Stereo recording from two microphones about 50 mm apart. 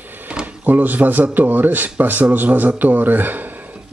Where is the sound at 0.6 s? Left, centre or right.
Right.